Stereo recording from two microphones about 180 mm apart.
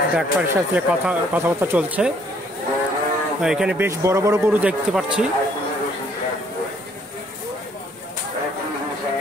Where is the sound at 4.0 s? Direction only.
20° right (ahead or behind).